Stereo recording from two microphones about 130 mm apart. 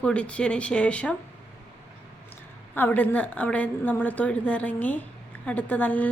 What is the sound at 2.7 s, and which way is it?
A woman's voice, 15° left (ahead or behind).